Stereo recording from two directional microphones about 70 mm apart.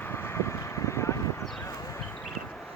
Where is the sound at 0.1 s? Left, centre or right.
Left.